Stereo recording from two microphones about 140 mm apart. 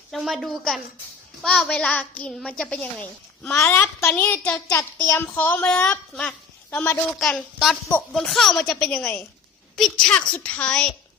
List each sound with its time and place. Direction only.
0.1 s a woman's voice: centre (ahead or behind)
7.2 s a woman's voice: centre (ahead or behind)